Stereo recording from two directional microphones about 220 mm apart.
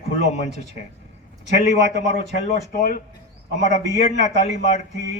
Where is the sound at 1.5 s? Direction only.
30° left (ahead or behind).